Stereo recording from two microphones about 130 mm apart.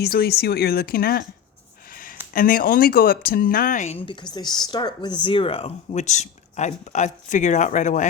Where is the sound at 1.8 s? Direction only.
90° left.